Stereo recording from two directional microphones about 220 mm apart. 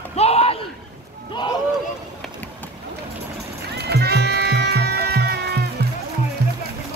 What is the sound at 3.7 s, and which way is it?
Music, 45° right (ahead or behind).